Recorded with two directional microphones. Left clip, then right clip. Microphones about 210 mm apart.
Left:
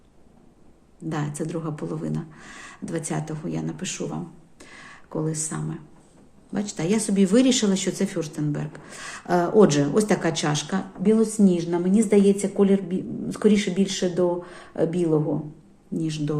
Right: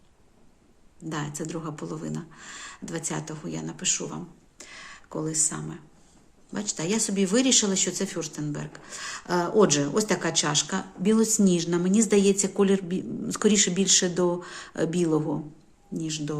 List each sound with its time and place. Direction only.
1.1 s speech: 5° right (ahead or behind)
11.0 s a woman's voice: 25° right (ahead or behind)
15.9 s speech: 5° right (ahead or behind)